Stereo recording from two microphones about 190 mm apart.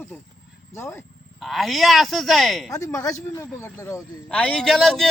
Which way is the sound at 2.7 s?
15° left (ahead or behind).